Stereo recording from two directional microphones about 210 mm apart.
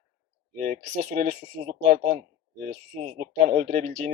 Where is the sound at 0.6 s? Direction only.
40° right (ahead or behind).